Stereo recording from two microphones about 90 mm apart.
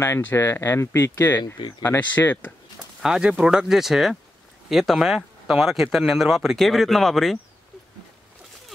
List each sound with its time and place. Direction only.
0.0 s speech: 25° left (ahead or behind)
3.0 s speech: 10° right (ahead or behind)